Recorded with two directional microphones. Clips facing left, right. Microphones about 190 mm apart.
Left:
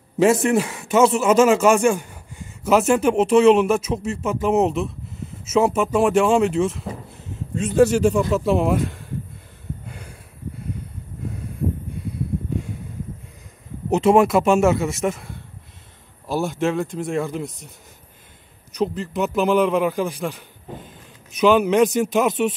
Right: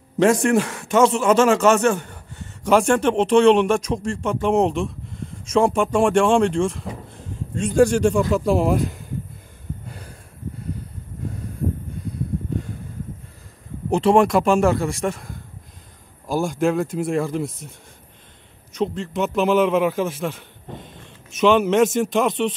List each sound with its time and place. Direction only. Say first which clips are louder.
0.2 s speech: even; 5° left (ahead or behind)
9.8 s a sound: even; 35° right (ahead or behind)
13.8 s speech: left 1 dB; 5° left (ahead or behind)